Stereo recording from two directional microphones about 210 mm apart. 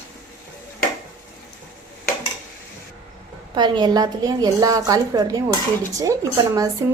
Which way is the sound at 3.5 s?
20° right (ahead or behind).